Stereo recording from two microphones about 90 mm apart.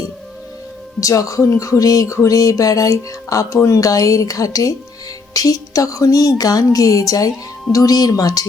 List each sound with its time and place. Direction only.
0.9 s speech: 40° left (ahead or behind)